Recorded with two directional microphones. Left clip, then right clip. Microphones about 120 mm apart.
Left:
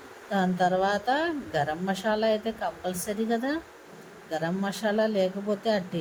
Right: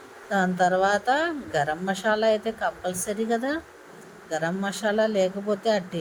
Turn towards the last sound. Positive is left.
turn(degrees=-15)  # may be behind; listen again after turning